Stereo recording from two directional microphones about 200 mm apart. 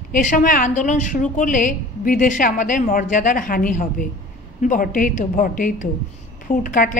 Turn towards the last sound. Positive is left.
turn(degrees=40)  # may be behind; listen again after turning